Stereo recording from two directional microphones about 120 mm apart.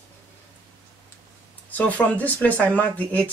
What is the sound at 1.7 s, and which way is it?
Speech, 15° left (ahead or behind).